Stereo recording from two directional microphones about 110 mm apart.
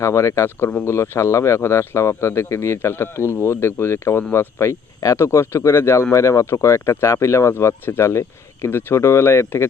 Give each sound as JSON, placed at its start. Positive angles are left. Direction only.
{"t": 0.0, "sound": "speech", "side_deg": 25}